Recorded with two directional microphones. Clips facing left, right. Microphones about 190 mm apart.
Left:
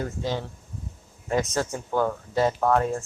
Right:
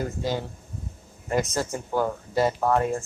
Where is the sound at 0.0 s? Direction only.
10° right (ahead or behind).